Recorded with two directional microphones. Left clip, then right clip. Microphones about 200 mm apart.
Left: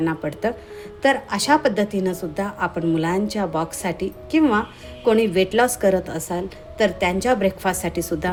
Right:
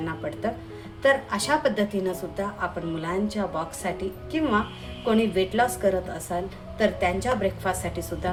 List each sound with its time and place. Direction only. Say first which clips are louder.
0.0 s a woman's voice: left 6 dB; 40° left (ahead or behind)